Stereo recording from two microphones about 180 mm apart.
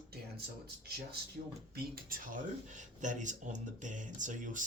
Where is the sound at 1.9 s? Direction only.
50° right (ahead or behind).